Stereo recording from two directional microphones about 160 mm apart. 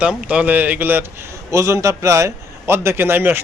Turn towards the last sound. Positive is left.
turn(degrees=-15)  # may be behind; listen again after turning